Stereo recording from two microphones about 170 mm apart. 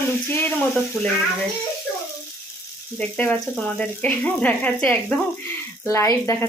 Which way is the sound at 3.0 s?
10° left (ahead or behind).